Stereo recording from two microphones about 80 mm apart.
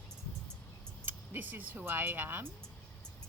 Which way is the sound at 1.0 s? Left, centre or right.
Right.